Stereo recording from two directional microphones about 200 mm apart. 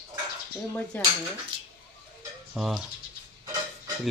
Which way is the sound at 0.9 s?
10° left (ahead or behind).